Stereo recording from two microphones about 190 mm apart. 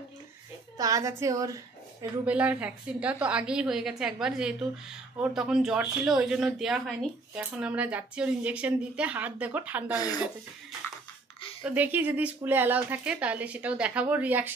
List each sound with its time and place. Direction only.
0.7 s a woman's voice: 20° right (ahead or behind)
2.3 s a woman's voice: 5° right (ahead or behind)
11.6 s speech: 10° right (ahead or behind)